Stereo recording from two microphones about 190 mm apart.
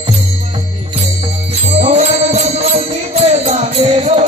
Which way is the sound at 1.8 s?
35° right (ahead or behind).